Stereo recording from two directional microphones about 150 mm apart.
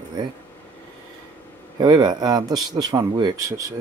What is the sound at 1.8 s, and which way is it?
Speech, 30° right (ahead or behind).